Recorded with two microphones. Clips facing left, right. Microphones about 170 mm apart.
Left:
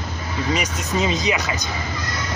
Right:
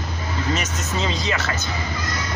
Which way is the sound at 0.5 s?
15° left (ahead or behind).